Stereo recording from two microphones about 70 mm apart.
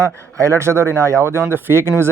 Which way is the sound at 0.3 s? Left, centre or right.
Right.